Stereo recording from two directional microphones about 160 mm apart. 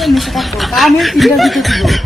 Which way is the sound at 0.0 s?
Centre (ahead or behind).